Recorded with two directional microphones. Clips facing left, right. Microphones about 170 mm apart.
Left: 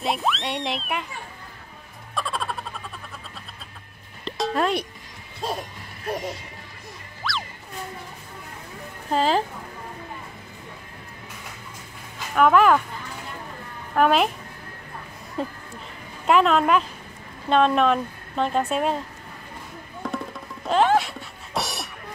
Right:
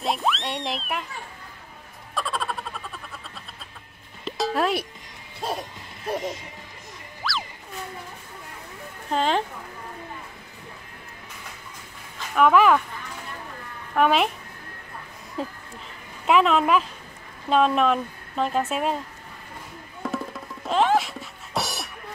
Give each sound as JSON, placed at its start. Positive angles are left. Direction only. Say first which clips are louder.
{"t": 0.0, "sound": "speech", "louder": "even", "side_deg": 0}
{"t": 2.1, "sound": "music", "louder": "even", "side_deg": 0}
{"t": 4.2, "sound": "music", "louder": "even", "side_deg": 0}
{"t": 6.0, "sound": "speech", "louder": "right 1 dB", "side_deg": -20}
{"t": 7.2, "sound": "music", "louder": "even", "side_deg": 0}
{"t": 9.1, "sound": "speech", "louder": "left 2 dB", "side_deg": 5}
{"t": 12.4, "sound": "speech", "louder": "left 1 dB", "side_deg": 0}
{"t": 13.9, "sound": "speech", "louder": "left 1 dB", "side_deg": 0}
{"t": 15.4, "sound": "speech", "louder": "left 2 dB", "side_deg": 0}
{"t": 20.0, "sound": "music", "louder": "right 1 dB", "side_deg": 0}